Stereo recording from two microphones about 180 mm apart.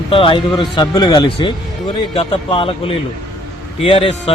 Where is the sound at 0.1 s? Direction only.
30° left (ahead or behind).